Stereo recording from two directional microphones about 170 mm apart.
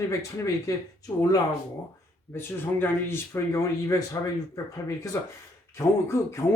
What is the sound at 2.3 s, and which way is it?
Speech, 15° left (ahead or behind).